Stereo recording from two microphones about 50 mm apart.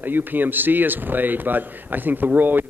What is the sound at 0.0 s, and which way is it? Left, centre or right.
A man's voice, right.